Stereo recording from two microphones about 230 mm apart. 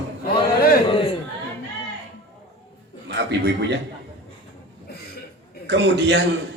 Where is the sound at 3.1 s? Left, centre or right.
Right.